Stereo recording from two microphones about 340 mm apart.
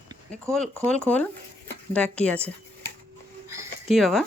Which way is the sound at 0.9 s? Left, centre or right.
Centre.